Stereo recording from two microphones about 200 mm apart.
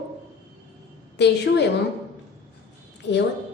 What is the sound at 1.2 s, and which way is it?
Speech, 60° left (ahead or behind).